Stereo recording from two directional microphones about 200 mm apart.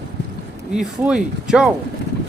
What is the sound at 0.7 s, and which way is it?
Speech, 5° right (ahead or behind).